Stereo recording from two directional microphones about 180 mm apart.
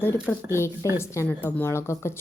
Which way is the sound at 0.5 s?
15° left (ahead or behind).